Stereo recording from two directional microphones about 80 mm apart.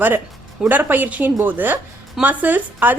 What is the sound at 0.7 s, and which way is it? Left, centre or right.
A woman's voice, right.